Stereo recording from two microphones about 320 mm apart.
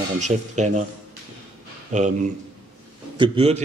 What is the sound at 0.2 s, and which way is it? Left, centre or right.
Speech, right.